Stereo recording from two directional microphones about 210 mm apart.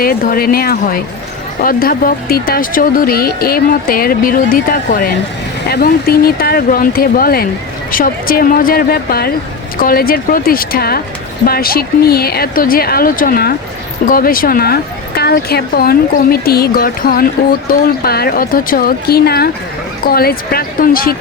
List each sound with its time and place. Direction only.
0.0 s speech: 45° left (ahead or behind)